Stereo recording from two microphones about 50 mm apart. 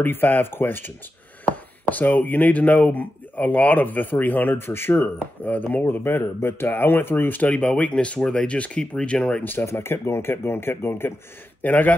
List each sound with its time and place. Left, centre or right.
0.0 s speech: left
5.0 s speech: left
5.9 s speech: left
7.4 s speech: left
9.4 s speech: left
9.8 s speech: left
11.6 s a man's voice: left